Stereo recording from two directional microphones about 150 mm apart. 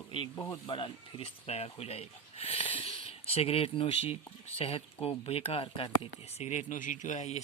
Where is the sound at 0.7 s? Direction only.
35° left (ahead or behind).